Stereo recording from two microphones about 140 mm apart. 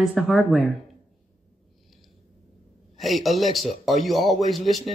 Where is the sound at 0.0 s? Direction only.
Centre (ahead or behind).